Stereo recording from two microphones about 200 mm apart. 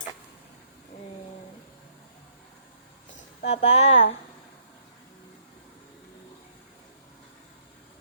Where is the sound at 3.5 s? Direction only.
35° left (ahead or behind).